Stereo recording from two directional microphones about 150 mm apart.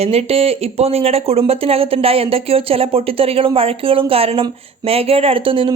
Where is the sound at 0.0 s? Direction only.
45° right (ahead or behind).